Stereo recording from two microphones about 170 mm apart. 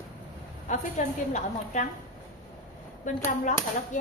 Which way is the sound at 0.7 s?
45° left (ahead or behind).